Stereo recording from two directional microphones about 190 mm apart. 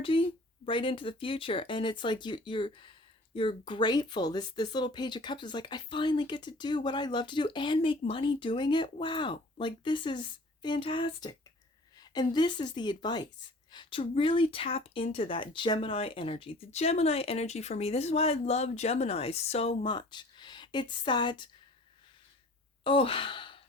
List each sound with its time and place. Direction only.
0.0 s speech: 25° left (ahead or behind)
22.8 s sigh: 30° left (ahead or behind)